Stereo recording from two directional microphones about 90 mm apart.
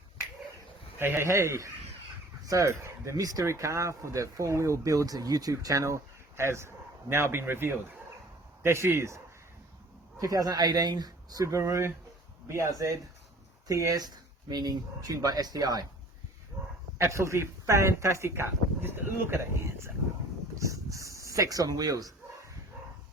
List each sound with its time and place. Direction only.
0.9 s speech: 25° right (ahead or behind); by 15.9 s 45° right (ahead or behind)
17.0 s speech: 30° right (ahead or behind)